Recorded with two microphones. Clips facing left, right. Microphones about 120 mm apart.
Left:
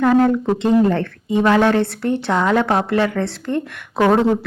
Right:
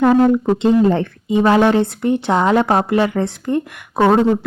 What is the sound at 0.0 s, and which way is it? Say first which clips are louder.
A woman's voice: right 2 dB; 20° right (ahead or behind).